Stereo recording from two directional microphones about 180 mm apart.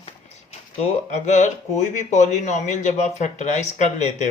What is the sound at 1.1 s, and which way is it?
Speech, 40° left (ahead or behind).